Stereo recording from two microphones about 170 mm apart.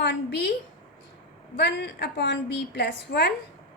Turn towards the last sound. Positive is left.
turn(degrees=70)  # may be behind; listen again after turning